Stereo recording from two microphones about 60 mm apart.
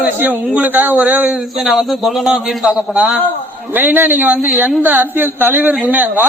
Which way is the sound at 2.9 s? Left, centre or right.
Right.